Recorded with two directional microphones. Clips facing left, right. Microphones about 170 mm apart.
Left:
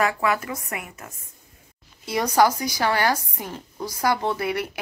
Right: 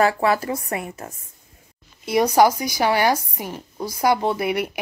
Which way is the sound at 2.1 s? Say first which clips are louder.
Right 4 dB; 15° right (ahead or behind).